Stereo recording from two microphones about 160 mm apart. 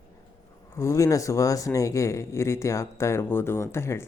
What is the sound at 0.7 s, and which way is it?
Speech, 20° left (ahead or behind).